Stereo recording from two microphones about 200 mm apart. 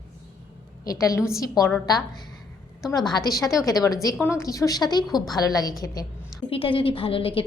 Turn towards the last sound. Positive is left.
turn(degrees=25)  # may be behind; listen again after turning